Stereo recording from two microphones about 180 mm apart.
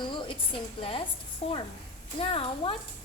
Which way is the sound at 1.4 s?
35° left (ahead or behind).